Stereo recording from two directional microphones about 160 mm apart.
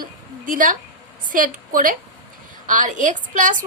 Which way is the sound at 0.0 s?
60° right (ahead or behind).